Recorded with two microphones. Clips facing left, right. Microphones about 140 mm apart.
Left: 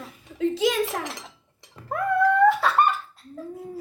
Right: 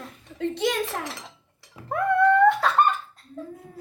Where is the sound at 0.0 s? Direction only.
Centre (ahead or behind).